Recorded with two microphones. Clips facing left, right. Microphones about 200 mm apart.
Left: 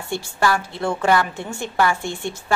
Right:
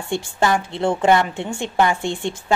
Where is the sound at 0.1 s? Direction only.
20° right (ahead or behind).